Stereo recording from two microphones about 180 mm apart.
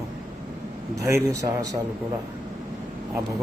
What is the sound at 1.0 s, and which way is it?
Speech, 15° right (ahead or behind).